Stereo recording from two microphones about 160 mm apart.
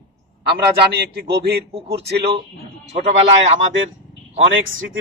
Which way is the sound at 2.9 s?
40° right (ahead or behind).